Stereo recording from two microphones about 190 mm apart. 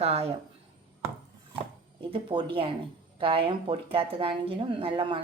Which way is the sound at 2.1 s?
25° right (ahead or behind).